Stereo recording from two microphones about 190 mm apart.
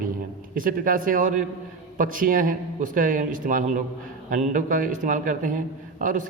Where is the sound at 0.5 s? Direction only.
45° right (ahead or behind).